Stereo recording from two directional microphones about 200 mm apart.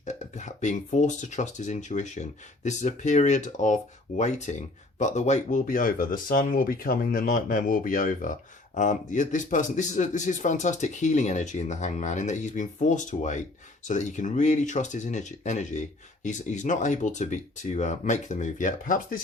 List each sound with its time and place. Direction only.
0.0 s speech: 35° left (ahead or behind)